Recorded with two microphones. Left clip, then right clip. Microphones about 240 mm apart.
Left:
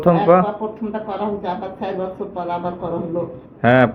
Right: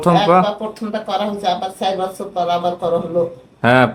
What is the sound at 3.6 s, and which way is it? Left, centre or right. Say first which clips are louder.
Speech: right 1 dB; centre.